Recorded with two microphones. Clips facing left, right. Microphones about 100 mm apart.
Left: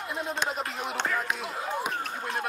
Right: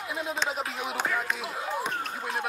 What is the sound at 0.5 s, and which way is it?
Basketball bounce, centre (ahead or behind).